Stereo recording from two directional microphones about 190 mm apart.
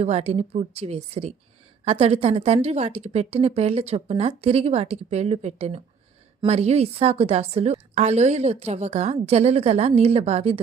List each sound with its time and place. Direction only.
0.0 s a woman's voice: 35° right (ahead or behind)